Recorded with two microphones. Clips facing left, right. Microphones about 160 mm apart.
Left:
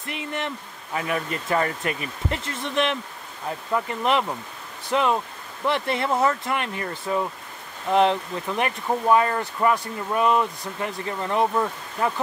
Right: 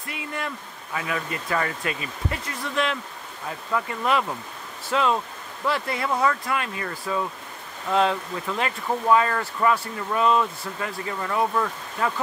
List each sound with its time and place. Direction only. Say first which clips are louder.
0.0 s speech: left 2 dB; 25° left (ahead or behind)
2.3 s speech: left 3 dB; 25° left (ahead or behind)